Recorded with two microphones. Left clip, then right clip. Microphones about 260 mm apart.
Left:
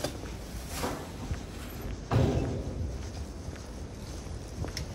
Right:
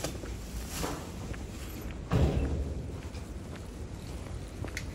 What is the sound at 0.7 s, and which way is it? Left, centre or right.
Boat, left.